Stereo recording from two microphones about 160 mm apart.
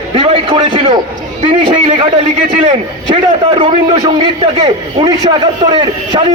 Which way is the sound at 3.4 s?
35° right (ahead or behind).